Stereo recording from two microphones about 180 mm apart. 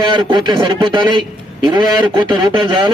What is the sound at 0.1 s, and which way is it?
Speech, 25° right (ahead or behind).